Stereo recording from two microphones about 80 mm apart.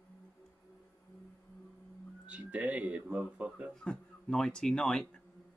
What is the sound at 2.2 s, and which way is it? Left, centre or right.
Speech, centre.